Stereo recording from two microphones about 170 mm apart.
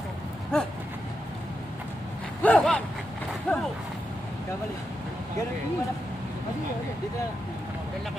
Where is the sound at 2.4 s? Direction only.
5° left (ahead or behind).